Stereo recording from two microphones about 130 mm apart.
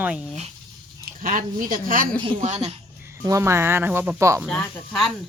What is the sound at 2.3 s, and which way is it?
Speech, 65° right (ahead or behind).